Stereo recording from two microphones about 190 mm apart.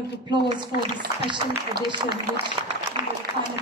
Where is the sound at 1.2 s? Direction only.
25° right (ahead or behind).